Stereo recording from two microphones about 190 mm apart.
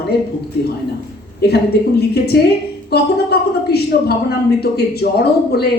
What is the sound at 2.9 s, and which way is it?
A man's voice, 55° left (ahead or behind).